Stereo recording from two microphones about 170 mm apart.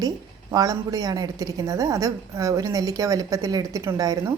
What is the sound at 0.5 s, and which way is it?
A woman's voice, 20° right (ahead or behind).